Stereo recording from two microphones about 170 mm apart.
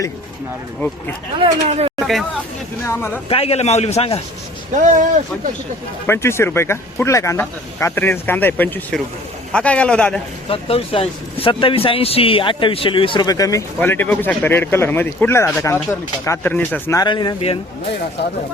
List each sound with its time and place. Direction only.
1.4 s speech: 35° right (ahead or behind)
2.8 s speech: 15° left (ahead or behind)
3.2 s a man's voice: 35° left (ahead or behind)
4.7 s speech: 45° right (ahead or behind)
6.1 s speech: 15° left (ahead or behind)
10.5 s a man's voice: 35° left (ahead or behind)